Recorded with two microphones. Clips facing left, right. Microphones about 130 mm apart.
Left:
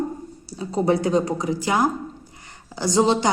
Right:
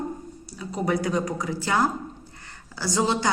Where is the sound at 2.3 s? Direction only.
15° left (ahead or behind).